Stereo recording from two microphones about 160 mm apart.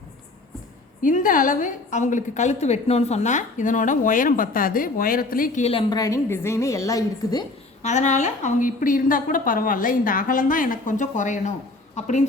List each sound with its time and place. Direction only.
1.0 s a woman's voice: 55° left (ahead or behind)
5.9 s a woman's voice: 20° left (ahead or behind)
7.8 s a woman's voice: 45° left (ahead or behind)